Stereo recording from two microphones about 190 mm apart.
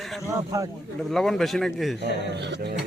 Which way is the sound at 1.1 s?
Centre (ahead or behind).